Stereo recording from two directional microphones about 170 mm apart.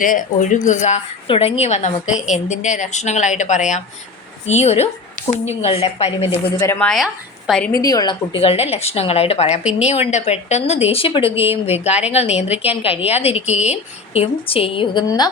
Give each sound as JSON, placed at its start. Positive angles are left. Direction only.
{"t": 0.0, "sound": "a woman's voice", "side_deg": 50}
{"t": 6.7, "sound": "a woman's voice", "side_deg": 0}
{"t": 7.7, "sound": "a woman's voice", "side_deg": 20}
{"t": 8.4, "sound": "a woman's voice", "side_deg": 35}